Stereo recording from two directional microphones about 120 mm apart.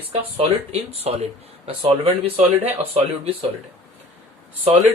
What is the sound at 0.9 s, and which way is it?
Speech, 60° right (ahead or behind).